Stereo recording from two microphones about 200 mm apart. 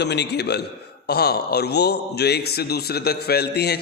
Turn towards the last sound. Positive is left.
turn(degrees=55)  # may be behind; listen again after turning